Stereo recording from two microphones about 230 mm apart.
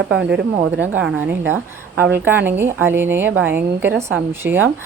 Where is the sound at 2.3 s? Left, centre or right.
Centre.